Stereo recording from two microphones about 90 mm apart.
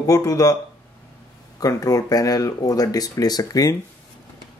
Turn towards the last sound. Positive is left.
turn(degrees=40)  # may be behind; listen again after turning